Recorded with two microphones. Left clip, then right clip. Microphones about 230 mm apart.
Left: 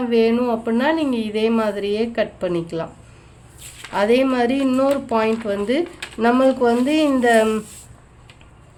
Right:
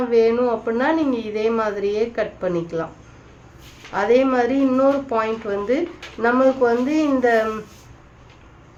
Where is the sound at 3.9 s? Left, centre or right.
Left.